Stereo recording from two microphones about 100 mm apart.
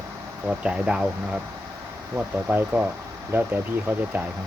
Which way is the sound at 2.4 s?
15° right (ahead or behind).